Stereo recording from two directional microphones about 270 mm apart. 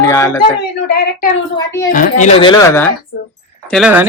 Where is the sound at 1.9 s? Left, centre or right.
Left; by 2.9 s centre.